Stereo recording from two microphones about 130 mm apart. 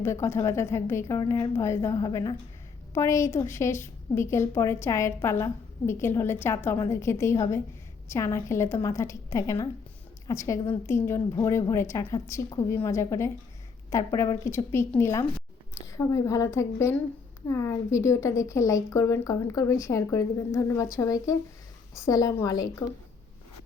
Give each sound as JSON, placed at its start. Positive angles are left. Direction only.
{"t": 0.0, "sound": "a woman's voice", "side_deg": 20}